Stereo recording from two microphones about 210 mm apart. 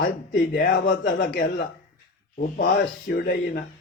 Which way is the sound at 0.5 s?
50° left (ahead or behind).